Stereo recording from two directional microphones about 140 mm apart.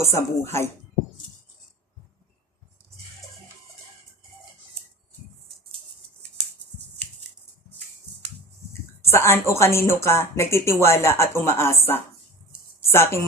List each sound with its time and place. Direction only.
0.0 s speech: 20° left (ahead or behind)
9.0 s speech: 20° left (ahead or behind)
12.8 s a woman's voice: 20° left (ahead or behind)